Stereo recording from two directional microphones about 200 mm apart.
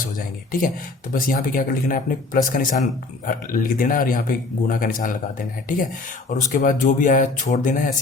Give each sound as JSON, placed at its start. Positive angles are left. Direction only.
{"t": 1.1, "sound": "speech", "side_deg": 45}
{"t": 6.3, "sound": "speech", "side_deg": 40}